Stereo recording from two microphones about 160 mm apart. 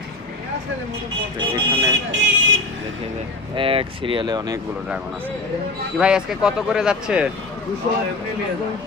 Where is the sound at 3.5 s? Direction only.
35° right (ahead or behind).